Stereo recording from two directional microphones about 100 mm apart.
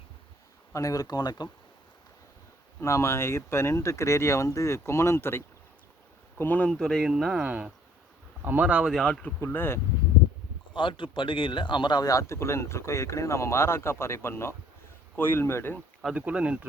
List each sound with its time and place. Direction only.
0.7 s speech: 35° left (ahead or behind)
2.8 s speech: 30° left (ahead or behind)
6.4 s speech: 15° left (ahead or behind)
6.7 s speech: 5° left (ahead or behind); by 8.8 s 15° right (ahead or behind)
8.8 s speech: centre (ahead or behind)
9.2 s speech: 20° left (ahead or behind)
10.8 s speech: 55° left (ahead or behind); by 15.8 s 25° left (ahead or behind)
16.0 s speech: 10° right (ahead or behind)